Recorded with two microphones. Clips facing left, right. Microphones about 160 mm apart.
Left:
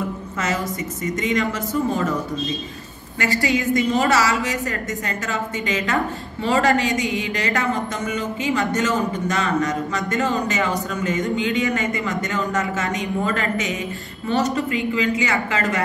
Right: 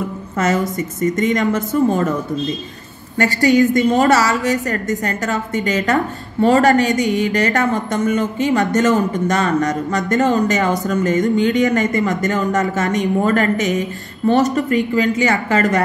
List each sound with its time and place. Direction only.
0.4 s a woman's voice: 45° right (ahead or behind)
3.2 s a woman's voice: 40° right (ahead or behind)